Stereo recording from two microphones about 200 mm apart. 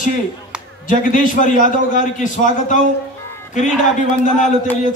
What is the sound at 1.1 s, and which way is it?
A man's voice, 40° left (ahead or behind).